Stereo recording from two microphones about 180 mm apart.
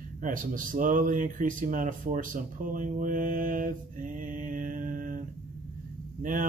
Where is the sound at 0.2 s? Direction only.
50° right (ahead or behind).